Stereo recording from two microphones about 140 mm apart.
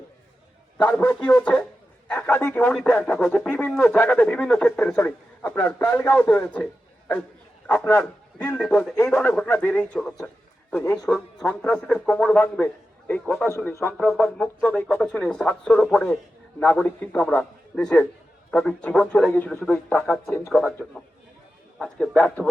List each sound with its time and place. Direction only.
0.9 s speech: 10° left (ahead or behind)
2.7 s speech: centre (ahead or behind)
7.7 s speech: 15° left (ahead or behind)
10.8 s a man's voice: 25° left (ahead or behind)
11.6 s a man's voice: 5° left (ahead or behind)
13.9 s speech: centre (ahead or behind)